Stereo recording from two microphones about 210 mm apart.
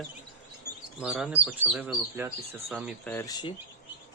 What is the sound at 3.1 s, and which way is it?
Speech, 15° left (ahead or behind).